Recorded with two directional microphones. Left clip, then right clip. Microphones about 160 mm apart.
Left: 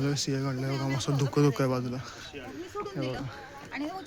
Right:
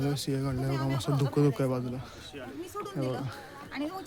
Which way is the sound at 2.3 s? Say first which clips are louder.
Even; 45° right (ahead or behind).